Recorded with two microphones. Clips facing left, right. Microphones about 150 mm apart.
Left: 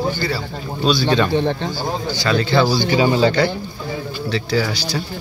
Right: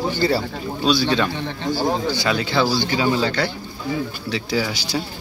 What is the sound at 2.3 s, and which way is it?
Speech, 10° right (ahead or behind).